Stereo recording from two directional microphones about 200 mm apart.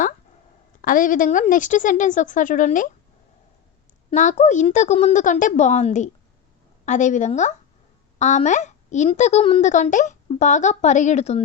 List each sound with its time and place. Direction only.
0.8 s a woman's voice: 45° left (ahead or behind)
4.1 s a woman's voice: 35° left (ahead or behind)